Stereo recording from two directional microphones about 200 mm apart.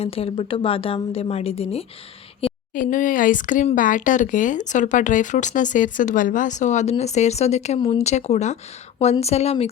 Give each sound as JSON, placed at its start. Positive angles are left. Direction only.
{"t": 0.0, "sound": "a woman's voice", "side_deg": 30}
{"t": 2.7, "sound": "speech", "side_deg": 40}